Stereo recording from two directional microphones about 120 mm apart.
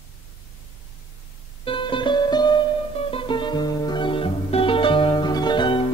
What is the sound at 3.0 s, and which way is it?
Music, 50° left (ahead or behind).